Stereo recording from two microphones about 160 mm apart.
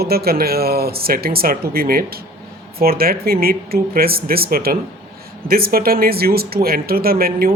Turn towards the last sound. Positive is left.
turn(degrees=-70)  # may be behind; listen again after turning